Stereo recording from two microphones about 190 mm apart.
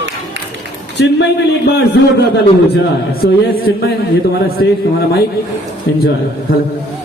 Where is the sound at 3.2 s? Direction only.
60° left (ahead or behind).